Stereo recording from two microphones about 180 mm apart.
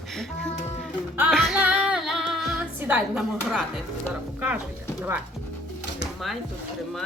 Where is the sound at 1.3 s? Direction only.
Centre (ahead or behind).